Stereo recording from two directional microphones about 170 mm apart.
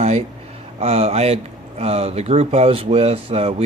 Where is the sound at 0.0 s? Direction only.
40° right (ahead or behind).